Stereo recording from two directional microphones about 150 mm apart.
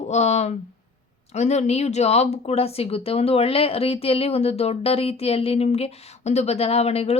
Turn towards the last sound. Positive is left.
turn(degrees=40)  # may be behind; listen again after turning